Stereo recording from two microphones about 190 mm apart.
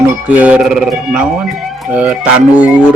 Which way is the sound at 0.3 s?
5° right (ahead or behind).